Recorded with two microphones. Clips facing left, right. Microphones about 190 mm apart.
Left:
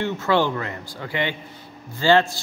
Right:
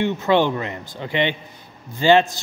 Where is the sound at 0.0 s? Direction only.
20° right (ahead or behind).